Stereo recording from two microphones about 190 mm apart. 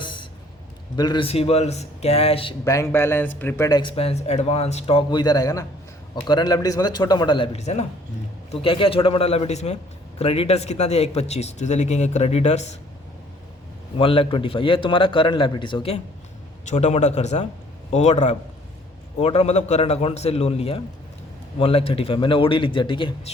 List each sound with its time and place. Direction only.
0.0 s a sound: 25° left (ahead or behind)
0.9 s speech: 25° left (ahead or behind)
2.6 s speech: 15° left (ahead or behind); by 12.7 s 35° left (ahead or behind)
14.0 s speech: 30° left (ahead or behind)
16.6 s speech: 40° left (ahead or behind)